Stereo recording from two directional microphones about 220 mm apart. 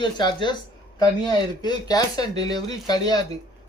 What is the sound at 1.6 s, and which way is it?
Speech, 15° left (ahead or behind).